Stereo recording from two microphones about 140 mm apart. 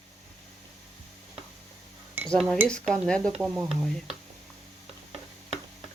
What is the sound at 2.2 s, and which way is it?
Cutlery, 5° left (ahead or behind).